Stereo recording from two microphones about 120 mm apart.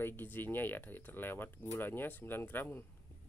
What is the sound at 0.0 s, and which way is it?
Speech, 15° left (ahead or behind).